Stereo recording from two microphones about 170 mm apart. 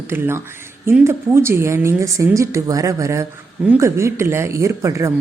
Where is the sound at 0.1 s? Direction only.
15° right (ahead or behind).